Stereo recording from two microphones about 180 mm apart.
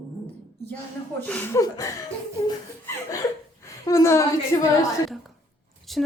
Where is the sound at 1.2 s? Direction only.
10° left (ahead or behind).